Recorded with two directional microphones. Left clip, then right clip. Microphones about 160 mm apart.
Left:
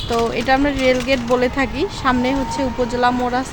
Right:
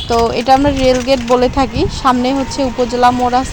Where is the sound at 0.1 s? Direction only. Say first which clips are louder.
Right 6 dB; 25° right (ahead or behind).